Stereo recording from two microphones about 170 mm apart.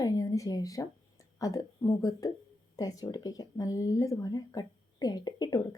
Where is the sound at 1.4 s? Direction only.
20° left (ahead or behind).